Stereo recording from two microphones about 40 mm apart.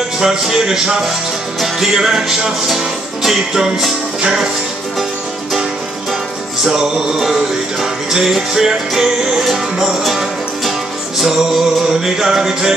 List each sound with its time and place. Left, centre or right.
0.2 s music: centre
2.0 s music: centre
6.6 s music: centre